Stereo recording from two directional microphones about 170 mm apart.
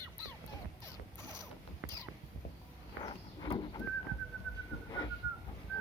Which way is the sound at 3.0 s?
25° left (ahead or behind).